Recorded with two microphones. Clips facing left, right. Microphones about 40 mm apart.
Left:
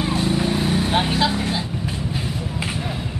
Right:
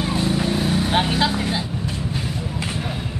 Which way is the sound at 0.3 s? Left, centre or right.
Centre.